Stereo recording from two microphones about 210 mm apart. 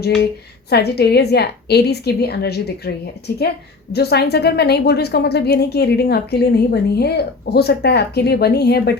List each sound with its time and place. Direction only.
0.7 s a woman's voice: 50° left (ahead or behind)
3.9 s a woman's voice: 50° left (ahead or behind)